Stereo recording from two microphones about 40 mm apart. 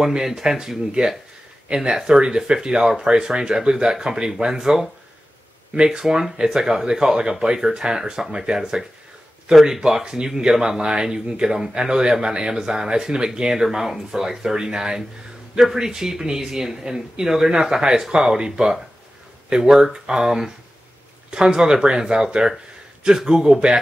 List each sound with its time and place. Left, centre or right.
0.1 s speech: centre
5.9 s speech: centre